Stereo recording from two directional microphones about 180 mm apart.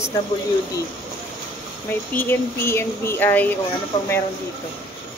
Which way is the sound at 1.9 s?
10° left (ahead or behind).